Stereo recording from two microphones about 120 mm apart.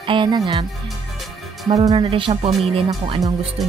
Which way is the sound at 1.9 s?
50° right (ahead or behind).